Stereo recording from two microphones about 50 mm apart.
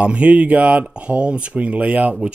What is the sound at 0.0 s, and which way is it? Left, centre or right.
Speech, right.